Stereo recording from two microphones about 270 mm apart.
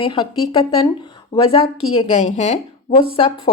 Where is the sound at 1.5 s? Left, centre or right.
Left.